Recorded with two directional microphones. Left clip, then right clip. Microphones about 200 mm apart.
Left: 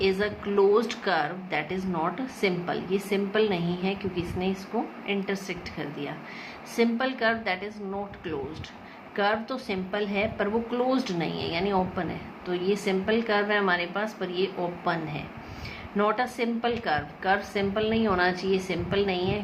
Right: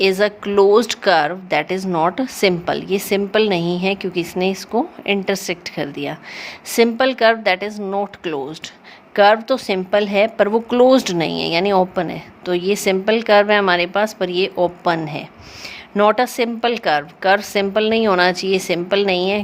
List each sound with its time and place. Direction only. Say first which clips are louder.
0.0 s a woman's voice: right 10 dB; 55° right (ahead or behind)